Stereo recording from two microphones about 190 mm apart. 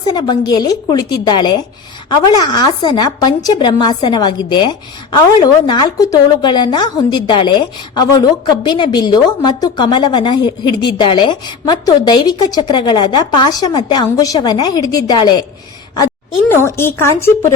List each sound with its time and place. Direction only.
0.1 s a woman's voice: 20° left (ahead or behind)
16.5 s a woman's voice: 15° left (ahead or behind)